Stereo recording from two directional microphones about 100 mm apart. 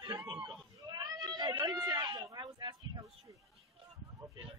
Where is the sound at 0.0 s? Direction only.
45° right (ahead or behind).